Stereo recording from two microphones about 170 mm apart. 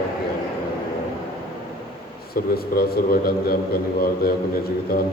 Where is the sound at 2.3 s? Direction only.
65° left (ahead or behind).